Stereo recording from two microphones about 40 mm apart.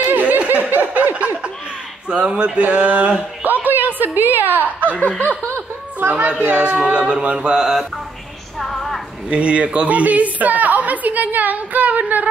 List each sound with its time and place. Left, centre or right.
0.0 s snicker: right
2.0 s a sound: right
2.7 s a woman's voice: right
3.4 s a woman's voice: right
5.9 s a woman's voice: right
6.6 s a sound: right
8.5 s music: centre
9.3 s a woman's voice: right